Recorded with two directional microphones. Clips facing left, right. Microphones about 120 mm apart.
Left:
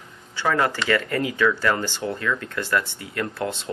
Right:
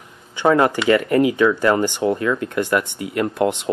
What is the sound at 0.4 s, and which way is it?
Speech, 20° right (ahead or behind).